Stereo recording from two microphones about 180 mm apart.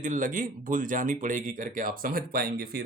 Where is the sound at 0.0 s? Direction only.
45° right (ahead or behind).